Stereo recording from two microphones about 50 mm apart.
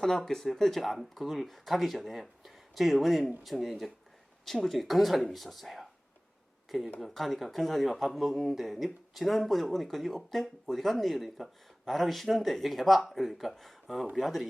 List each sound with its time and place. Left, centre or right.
0.0 s speech: centre